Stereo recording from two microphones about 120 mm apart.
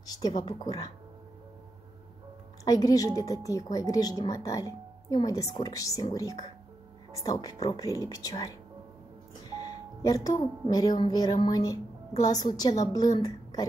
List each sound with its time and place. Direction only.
0.0 s speech: 30° left (ahead or behind)
2.6 s speech: 30° left (ahead or behind)
7.2 s speech: 30° left (ahead or behind)
9.6 s a woman's voice: 30° left (ahead or behind)